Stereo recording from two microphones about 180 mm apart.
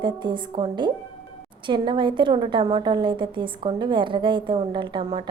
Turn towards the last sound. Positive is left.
turn(degrees=-25)  # may be behind; listen again after turning